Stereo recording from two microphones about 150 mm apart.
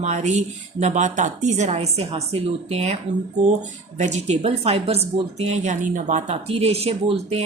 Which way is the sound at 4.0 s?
50° right (ahead or behind).